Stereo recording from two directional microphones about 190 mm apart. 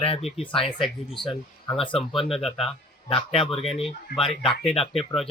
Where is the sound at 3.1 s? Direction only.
30° left (ahead or behind).